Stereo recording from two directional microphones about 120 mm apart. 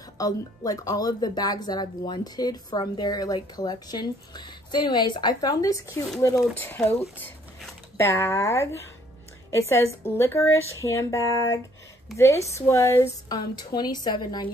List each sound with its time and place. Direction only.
0.2 s speech: 30° left (ahead or behind)
6.8 s speech: 10° left (ahead or behind)
8.0 s speech: 20° left (ahead or behind)
13.3 s speech: 35° left (ahead or behind)